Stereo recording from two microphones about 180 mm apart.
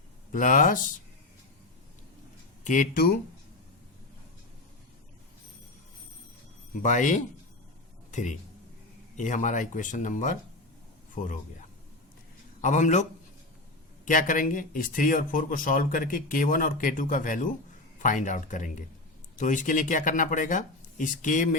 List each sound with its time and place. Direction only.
0.3 s speech: 50° left (ahead or behind)
2.6 s speech: 45° left (ahead or behind)
6.8 s a man's voice: 45° left (ahead or behind)
12.6 s speech: 45° left (ahead or behind)